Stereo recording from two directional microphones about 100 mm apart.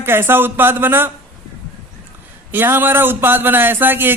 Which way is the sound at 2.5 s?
20° right (ahead or behind).